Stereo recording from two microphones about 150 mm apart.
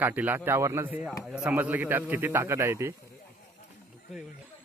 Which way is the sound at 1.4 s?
10° right (ahead or behind).